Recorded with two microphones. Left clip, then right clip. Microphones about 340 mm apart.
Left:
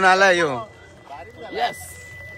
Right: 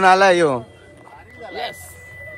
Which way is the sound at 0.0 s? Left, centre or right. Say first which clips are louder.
Right 3 dB; centre.